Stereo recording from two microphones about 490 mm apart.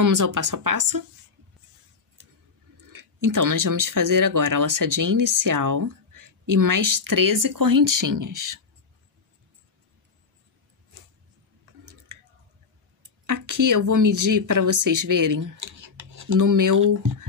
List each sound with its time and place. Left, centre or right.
0.0 s speech: right
2.9 s speech: right
12.1 s a sound: right
13.3 s speech: right